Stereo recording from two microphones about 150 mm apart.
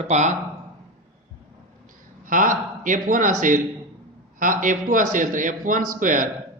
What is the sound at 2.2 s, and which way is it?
A man's voice, 65° right (ahead or behind).